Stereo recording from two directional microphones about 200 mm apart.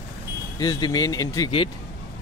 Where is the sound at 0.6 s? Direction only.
20° left (ahead or behind).